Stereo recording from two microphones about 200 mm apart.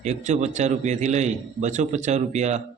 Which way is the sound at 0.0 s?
35° right (ahead or behind).